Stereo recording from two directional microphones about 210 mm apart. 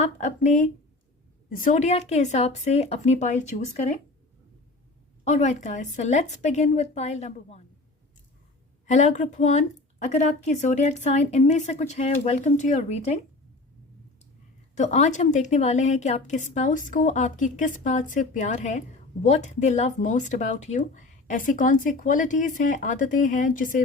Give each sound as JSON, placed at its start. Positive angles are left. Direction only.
{"t": 0.0, "sound": "speech", "side_deg": 35}
{"t": 5.2, "sound": "speech", "side_deg": 30}
{"t": 8.9, "sound": "speech", "side_deg": 35}
{"t": 14.8, "sound": "speech", "side_deg": 35}